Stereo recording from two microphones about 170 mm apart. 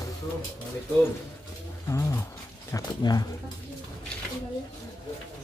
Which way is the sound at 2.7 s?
25° left (ahead or behind).